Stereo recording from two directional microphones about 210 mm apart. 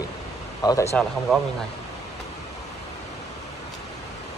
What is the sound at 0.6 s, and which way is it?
Speech, 15° left (ahead or behind).